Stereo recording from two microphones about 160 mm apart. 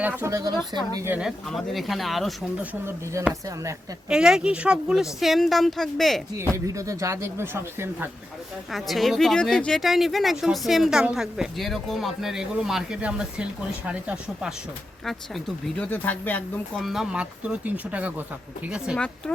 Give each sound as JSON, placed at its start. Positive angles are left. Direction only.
{"t": 0.0, "sound": "speech", "side_deg": -15}
{"t": 1.5, "sound": "speech", "side_deg": 0}
{"t": 2.8, "sound": "speech", "side_deg": -20}
{"t": 4.1, "sound": "speech", "side_deg": -5}
{"t": 6.4, "sound": "speech", "side_deg": -20}
{"t": 8.7, "sound": "speech", "side_deg": 0}
{"t": 15.6, "sound": "speech", "side_deg": 10}
{"t": 16.8, "sound": "speech", "side_deg": -5}
{"t": 18.9, "sound": "speech", "side_deg": 5}